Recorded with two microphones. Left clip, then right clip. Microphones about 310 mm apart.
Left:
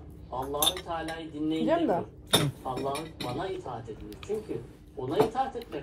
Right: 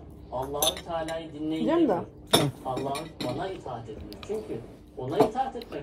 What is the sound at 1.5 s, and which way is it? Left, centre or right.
Speech, left.